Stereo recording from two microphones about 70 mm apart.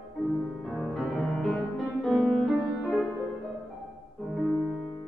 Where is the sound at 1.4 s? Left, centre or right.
Centre.